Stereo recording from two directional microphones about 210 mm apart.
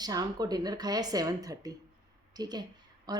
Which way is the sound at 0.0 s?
20° right (ahead or behind).